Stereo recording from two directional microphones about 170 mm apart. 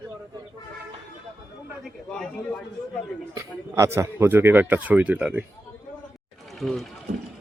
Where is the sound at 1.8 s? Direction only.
5° left (ahead or behind).